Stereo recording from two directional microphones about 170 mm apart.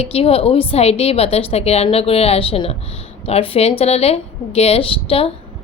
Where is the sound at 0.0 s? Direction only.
35° left (ahead or behind).